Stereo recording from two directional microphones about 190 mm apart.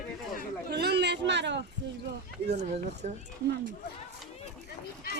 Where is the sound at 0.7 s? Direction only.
60° right (ahead or behind).